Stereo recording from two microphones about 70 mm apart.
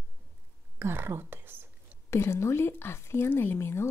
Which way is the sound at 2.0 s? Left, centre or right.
Left.